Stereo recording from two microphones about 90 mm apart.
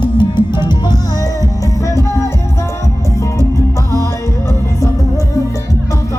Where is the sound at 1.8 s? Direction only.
35° left (ahead or behind).